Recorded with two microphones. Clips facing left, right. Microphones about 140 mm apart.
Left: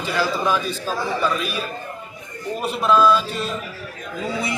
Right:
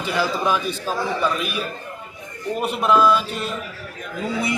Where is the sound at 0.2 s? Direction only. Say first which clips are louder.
Even; 15° right (ahead or behind).